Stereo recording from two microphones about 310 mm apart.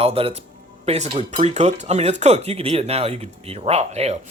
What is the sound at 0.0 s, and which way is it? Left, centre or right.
Speech, centre.